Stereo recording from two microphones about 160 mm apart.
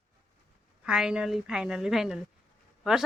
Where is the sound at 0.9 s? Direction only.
5° right (ahead or behind).